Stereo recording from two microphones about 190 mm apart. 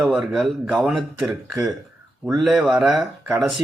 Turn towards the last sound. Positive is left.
turn(degrees=0)  # may be behind; listen again after turning